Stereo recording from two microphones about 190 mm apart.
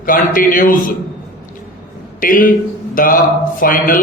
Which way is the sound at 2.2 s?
45° left (ahead or behind).